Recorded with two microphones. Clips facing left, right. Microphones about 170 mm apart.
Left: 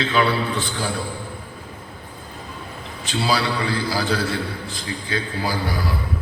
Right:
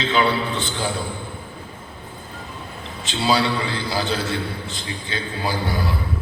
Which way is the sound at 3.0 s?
25° right (ahead or behind).